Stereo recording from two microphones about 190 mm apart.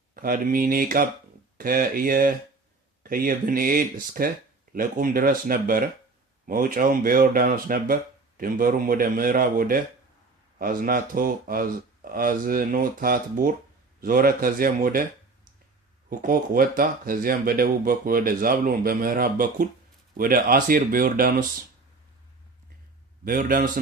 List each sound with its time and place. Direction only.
0.1 s speech: 50° right (ahead or behind)
16.0 s speech: 50° right (ahead or behind)
23.2 s speech: 45° right (ahead or behind)